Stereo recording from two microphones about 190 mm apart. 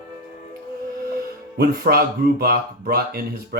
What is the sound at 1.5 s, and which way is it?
Speech, 55° right (ahead or behind).